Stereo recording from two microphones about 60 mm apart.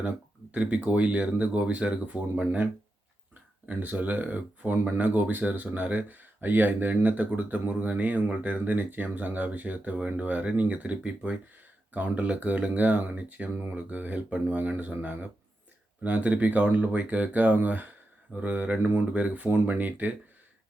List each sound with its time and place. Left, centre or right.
0.5 s speech: right
3.7 s speech: right